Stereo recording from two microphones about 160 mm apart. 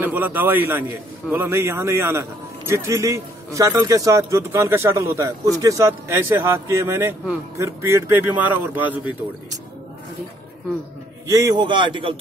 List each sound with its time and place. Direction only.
0.0 s a man's voice: 10° right (ahead or behind)
11.2 s speech: 20° right (ahead or behind)